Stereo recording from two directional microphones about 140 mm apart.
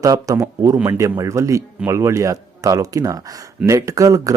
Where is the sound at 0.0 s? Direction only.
25° right (ahead or behind).